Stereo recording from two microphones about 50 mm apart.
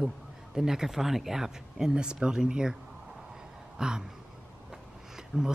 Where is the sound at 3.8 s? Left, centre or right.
Centre.